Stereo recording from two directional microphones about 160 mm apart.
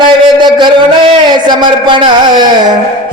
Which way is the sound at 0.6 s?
30° right (ahead or behind).